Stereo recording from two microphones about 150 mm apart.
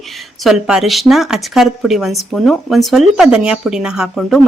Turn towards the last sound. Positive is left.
turn(degrees=0)  # may be behind; listen again after turning